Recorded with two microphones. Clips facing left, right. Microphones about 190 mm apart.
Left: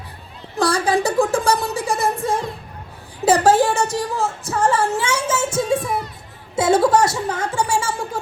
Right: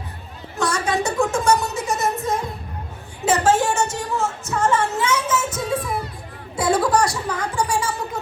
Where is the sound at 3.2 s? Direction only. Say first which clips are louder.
Left 4 dB; 35° left (ahead or behind).